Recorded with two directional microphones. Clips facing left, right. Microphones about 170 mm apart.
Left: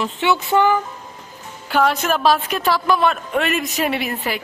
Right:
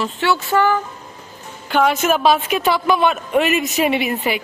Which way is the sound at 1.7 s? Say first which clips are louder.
Right 2 dB; centre (ahead or behind).